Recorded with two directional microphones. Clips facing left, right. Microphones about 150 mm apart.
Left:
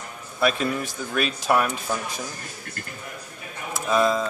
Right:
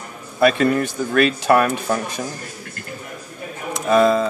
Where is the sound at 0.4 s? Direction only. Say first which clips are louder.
Right 7 dB; 65° right (ahead or behind).